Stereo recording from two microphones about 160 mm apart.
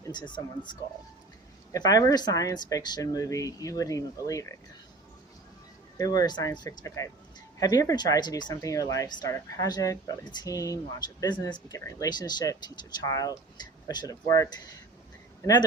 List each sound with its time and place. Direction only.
0.0 s speech: 25° left (ahead or behind)
1.7 s speech: 25° left (ahead or behind)
6.0 s speech: 20° left (ahead or behind)